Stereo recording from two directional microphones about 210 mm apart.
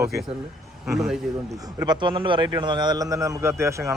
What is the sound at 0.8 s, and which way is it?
Speech, centre (ahead or behind).